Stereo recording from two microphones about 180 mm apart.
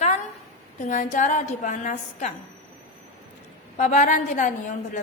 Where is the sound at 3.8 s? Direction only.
45° left (ahead or behind).